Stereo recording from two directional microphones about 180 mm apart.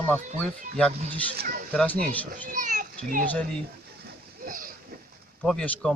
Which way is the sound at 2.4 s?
45° right (ahead or behind).